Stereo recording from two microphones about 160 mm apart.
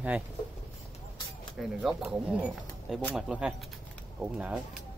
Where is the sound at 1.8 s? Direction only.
5° right (ahead or behind).